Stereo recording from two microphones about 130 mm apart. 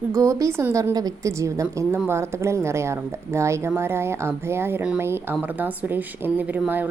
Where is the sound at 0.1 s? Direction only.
25° right (ahead or behind).